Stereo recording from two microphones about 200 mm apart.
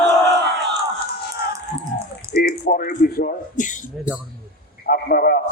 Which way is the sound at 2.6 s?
45° left (ahead or behind).